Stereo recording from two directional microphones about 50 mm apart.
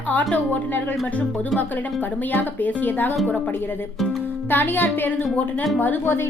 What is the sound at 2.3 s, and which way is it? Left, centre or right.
Speech, left.